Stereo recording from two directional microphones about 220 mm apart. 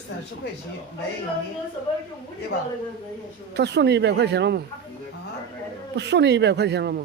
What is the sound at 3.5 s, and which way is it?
Speech, 50° right (ahead or behind).